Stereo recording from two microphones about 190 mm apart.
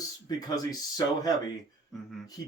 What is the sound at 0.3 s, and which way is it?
Speech, 20° left (ahead or behind).